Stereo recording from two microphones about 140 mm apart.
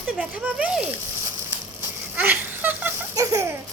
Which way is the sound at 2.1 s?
15° right (ahead or behind).